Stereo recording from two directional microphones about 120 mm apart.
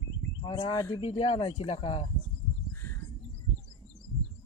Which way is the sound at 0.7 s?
25° left (ahead or behind).